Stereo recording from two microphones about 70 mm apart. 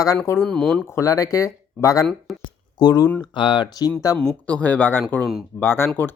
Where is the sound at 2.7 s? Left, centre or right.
Left.